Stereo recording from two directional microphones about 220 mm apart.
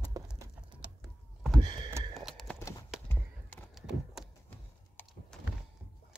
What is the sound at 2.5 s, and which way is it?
Clip-clop, 15° left (ahead or behind).